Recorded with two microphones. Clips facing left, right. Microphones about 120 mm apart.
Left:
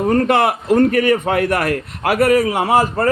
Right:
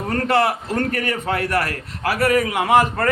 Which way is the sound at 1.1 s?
50° left (ahead or behind).